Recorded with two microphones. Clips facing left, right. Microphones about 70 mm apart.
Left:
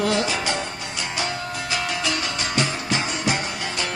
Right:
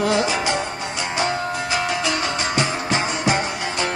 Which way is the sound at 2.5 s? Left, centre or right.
Right.